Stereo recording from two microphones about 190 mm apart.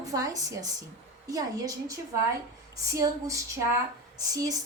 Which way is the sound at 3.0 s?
15° right (ahead or behind).